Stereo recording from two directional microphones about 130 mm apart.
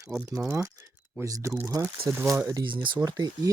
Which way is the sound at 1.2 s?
25° right (ahead or behind).